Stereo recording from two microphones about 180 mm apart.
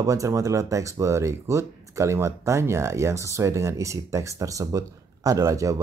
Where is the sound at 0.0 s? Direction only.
20° right (ahead or behind).